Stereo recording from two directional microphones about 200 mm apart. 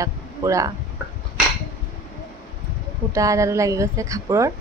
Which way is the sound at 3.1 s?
15° right (ahead or behind).